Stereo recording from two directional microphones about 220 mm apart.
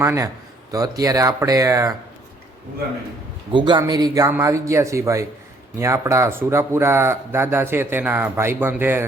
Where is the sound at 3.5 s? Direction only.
20° right (ahead or behind).